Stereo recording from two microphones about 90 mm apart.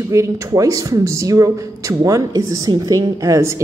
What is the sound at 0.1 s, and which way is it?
Speech, 30° right (ahead or behind).